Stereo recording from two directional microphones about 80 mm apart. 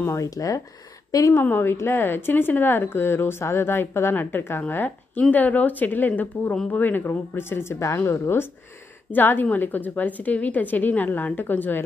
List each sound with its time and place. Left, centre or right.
0.0 s speech: left
1.3 s a woman's voice: left